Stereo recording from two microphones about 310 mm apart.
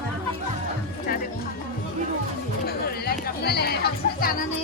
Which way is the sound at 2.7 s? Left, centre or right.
Left.